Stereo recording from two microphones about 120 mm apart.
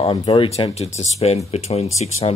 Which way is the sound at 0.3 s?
60° left (ahead or behind).